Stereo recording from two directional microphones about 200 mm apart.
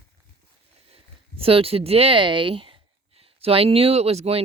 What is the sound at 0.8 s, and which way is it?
Speech, 30° right (ahead or behind).